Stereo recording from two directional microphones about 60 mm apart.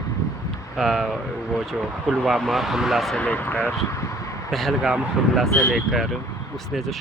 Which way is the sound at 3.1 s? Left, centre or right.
Left.